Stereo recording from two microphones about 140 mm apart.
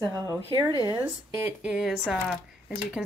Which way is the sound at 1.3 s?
10° right (ahead or behind).